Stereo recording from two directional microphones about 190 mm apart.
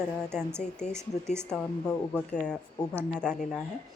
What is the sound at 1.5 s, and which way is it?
Speech, 5° left (ahead or behind).